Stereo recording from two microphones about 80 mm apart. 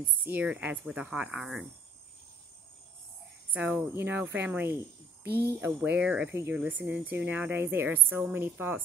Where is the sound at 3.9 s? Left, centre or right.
Right.